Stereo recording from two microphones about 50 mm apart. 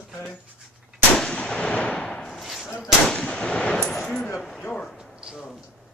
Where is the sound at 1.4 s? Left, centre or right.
Centre.